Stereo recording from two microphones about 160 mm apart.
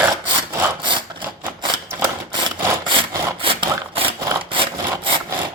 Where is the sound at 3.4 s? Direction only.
35° right (ahead or behind).